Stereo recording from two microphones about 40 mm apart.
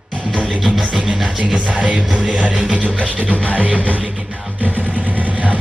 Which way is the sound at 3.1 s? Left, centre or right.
Right.